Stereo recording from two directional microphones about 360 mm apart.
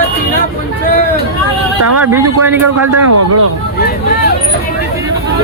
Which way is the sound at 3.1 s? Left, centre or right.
Right.